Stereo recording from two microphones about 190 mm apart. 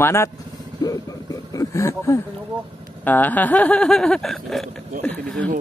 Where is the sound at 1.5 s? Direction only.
15° left (ahead or behind).